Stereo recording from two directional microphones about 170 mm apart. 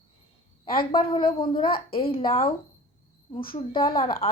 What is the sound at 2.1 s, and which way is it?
Speech, 35° left (ahead or behind).